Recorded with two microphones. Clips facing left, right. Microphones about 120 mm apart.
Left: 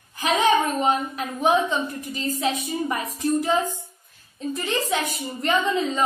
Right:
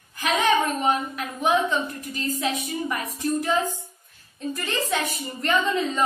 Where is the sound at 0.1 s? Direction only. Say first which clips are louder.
Left 2 dB; 25° left (ahead or behind).